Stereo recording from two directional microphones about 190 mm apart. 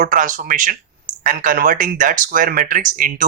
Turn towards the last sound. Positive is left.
turn(degrees=-45)  # may be behind; listen again after turning